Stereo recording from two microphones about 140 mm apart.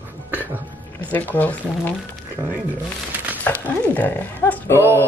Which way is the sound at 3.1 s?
10° right (ahead or behind).